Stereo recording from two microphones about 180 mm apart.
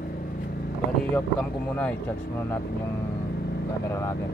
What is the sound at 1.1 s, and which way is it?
Speech, 5° left (ahead or behind).